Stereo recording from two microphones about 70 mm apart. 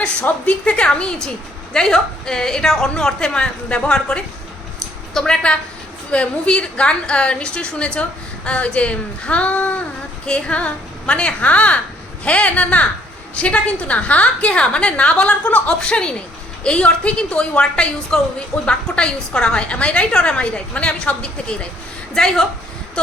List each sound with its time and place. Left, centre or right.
0.3 s a woman's voice: centre